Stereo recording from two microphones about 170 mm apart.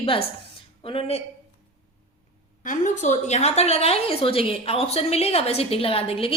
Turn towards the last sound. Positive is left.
turn(degrees=35)  # may be behind; listen again after turning